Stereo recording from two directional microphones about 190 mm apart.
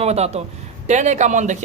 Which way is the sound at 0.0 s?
35° right (ahead or behind).